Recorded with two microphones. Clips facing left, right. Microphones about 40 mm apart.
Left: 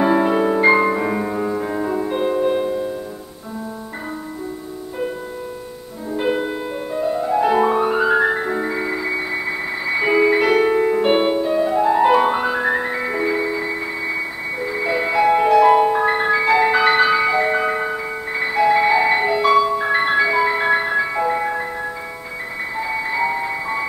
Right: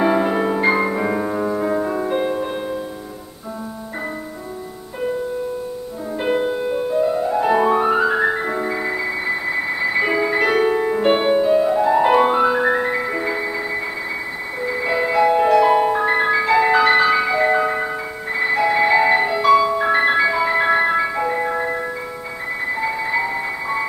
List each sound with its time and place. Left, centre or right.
0.0 s music: centre
6.1 s music: centre
23.0 s music: centre